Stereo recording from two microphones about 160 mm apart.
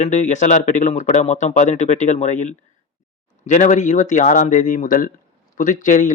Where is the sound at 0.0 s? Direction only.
45° left (ahead or behind).